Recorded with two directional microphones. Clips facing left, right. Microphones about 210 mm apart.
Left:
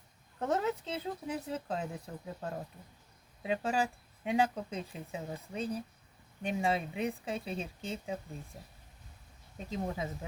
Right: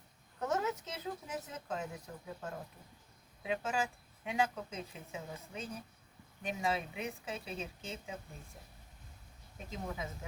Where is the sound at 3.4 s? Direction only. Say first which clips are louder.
Left 4 dB; 35° left (ahead or behind).